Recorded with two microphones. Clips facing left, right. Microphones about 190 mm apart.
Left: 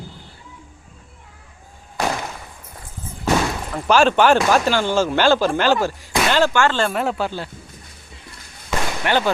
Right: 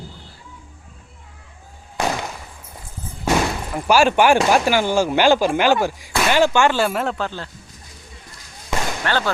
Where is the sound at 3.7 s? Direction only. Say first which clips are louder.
Even; 10° right (ahead or behind).